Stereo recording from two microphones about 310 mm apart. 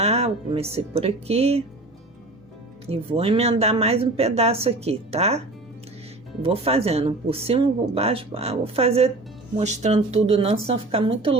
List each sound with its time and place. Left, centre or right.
0.0 s speech: centre
2.8 s speech: centre
6.4 s speech: centre